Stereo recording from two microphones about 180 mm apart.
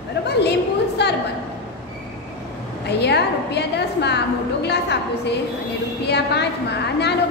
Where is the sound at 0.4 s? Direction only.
70° left (ahead or behind).